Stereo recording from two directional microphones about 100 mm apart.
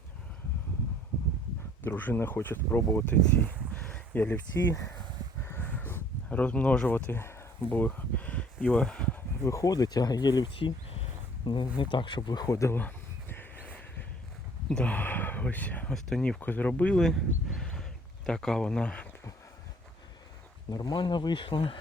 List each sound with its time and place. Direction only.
1.8 s speech: 20° left (ahead or behind)
5.4 s a sound: 25° left (ahead or behind)
9.4 s speech: 35° left (ahead or behind)
10.6 s a sound: 70° left (ahead or behind); by 11.7 s 50° left (ahead or behind)
11.8 s speech: 55° left (ahead or behind); by 12.8 s 30° left (ahead or behind)
12.8 s a sound: 20° left (ahead or behind)
14.7 s speech: 10° left (ahead or behind)
16.4 s speech: 15° left (ahead or behind)
20.7 s speech: 45° left (ahead or behind); by 21.8 s 60° left (ahead or behind)